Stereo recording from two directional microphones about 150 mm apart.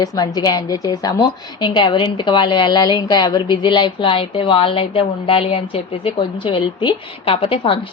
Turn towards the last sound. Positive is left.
turn(degrees=40)  # may be behind; listen again after turning